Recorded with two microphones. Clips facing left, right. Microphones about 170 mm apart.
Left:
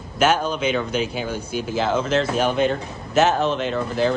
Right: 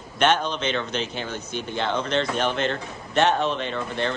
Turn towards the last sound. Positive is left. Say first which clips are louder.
# left 6 dB
turn(degrees=0)  # may be behind; listen again after turning